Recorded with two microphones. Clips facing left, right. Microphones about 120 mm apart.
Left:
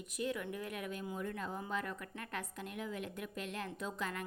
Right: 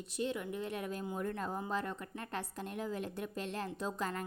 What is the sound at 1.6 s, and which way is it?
A woman's voice, 30° right (ahead or behind).